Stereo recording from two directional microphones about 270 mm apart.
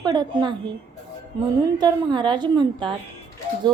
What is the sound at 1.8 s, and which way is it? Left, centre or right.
A woman's voice, centre.